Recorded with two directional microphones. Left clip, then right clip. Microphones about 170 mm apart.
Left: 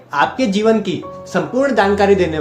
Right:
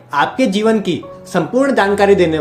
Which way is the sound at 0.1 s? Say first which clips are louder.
Right 1 dB; 40° right (ahead or behind).